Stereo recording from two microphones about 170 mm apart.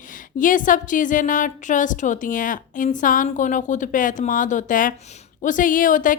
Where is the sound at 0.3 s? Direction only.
50° left (ahead or behind).